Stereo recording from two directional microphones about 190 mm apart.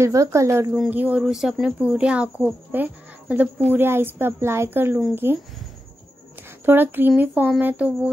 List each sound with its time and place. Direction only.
0.0 s speech: 15° right (ahead or behind)
6.6 s speech: 10° right (ahead or behind)